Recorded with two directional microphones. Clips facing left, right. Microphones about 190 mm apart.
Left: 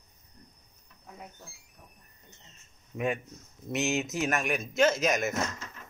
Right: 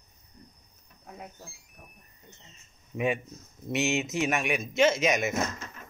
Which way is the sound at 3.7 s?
Centre (ahead or behind).